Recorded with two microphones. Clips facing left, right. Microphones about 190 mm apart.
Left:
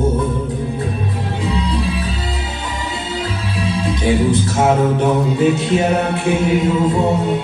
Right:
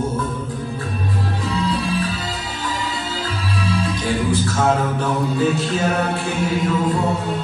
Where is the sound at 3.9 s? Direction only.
20° left (ahead or behind).